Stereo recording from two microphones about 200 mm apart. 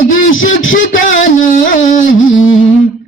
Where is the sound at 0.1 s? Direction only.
40° left (ahead or behind).